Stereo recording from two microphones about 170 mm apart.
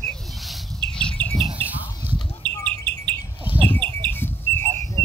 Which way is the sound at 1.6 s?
10° right (ahead or behind).